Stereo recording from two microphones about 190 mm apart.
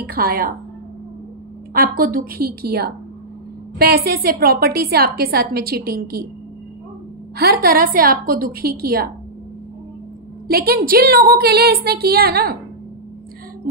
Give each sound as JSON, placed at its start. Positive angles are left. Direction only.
{"t": 0.0, "sound": "a woman's voice", "side_deg": -50}
{"t": 1.7, "sound": "a woman's voice", "side_deg": -50}
{"t": 7.3, "sound": "a woman's voice", "side_deg": -55}
{"t": 10.5, "sound": "a woman's voice", "side_deg": -50}